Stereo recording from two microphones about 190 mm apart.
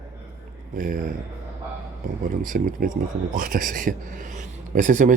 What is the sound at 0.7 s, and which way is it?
Speech, 45° right (ahead or behind).